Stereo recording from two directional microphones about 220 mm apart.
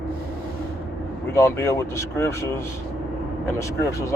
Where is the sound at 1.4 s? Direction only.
10° left (ahead or behind).